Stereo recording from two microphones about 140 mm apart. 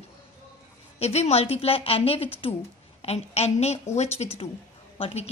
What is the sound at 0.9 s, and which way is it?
A woman's voice, 50° left (ahead or behind).